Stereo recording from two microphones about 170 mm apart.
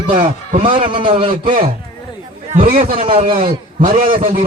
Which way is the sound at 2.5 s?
50° right (ahead or behind).